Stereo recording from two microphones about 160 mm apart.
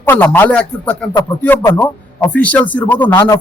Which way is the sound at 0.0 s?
10° left (ahead or behind).